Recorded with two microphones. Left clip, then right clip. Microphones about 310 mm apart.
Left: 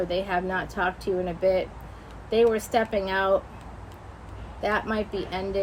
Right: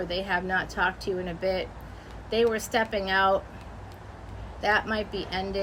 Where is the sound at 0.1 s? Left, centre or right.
Centre.